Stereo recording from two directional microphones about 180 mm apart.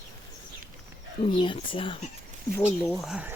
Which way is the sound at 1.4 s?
30° left (ahead or behind).